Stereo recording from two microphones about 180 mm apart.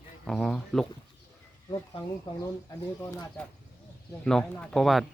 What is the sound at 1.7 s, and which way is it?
Speech, 25° left (ahead or behind).